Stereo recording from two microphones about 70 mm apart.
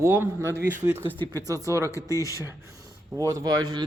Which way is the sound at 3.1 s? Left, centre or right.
Right.